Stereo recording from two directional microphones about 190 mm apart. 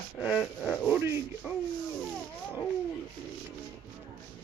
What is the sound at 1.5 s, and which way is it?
Rub, 5° right (ahead or behind).